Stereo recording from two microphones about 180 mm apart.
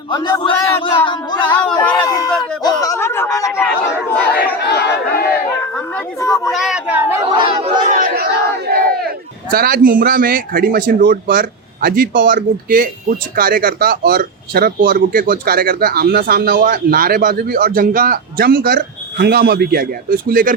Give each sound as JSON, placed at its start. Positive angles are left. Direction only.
{"t": 0.1, "sound": "speech", "side_deg": 20}
{"t": 1.5, "sound": "a woman's voice", "side_deg": 5}
{"t": 1.7, "sound": "speech", "side_deg": 20}
{"t": 2.6, "sound": "snicker", "side_deg": 20}
{"t": 4.6, "sound": "chatter", "side_deg": 65}
{"t": 5.7, "sound": "a woman's voice", "side_deg": 15}
{"t": 6.5, "sound": "a child's voice", "side_deg": 0}
{"t": 7.3, "sound": "speech", "side_deg": -35}
{"t": 8.0, "sound": "speech", "side_deg": -60}